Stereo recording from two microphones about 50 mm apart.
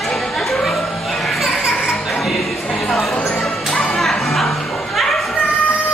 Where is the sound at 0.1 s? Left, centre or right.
Centre.